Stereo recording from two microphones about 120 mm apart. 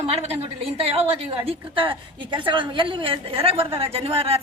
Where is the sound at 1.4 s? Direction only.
45° right (ahead or behind).